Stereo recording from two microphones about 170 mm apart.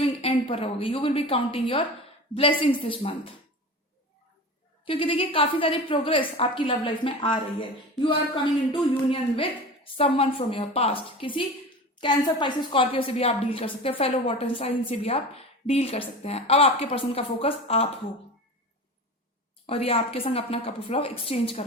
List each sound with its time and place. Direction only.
0.0 s a woman's voice: 30° left (ahead or behind)
4.9 s a woman's voice: 30° left (ahead or behind)
8.7 s a woman's voice: 30° left (ahead or behind)
19.6 s a woman's voice: 35° left (ahead or behind)